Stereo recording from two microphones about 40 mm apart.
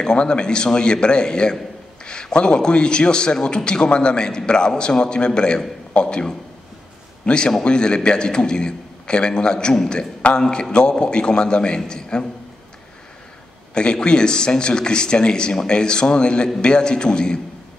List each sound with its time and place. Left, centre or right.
0.0 s a man's voice: left
13.7 s a man's voice: left